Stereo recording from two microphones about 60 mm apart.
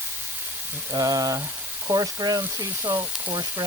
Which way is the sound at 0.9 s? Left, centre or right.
Right.